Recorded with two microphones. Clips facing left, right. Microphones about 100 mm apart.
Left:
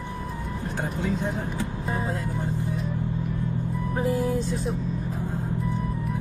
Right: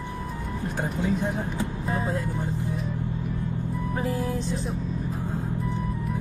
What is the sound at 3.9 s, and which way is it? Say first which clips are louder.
Speech: left 4 dB; 20° left (ahead or behind).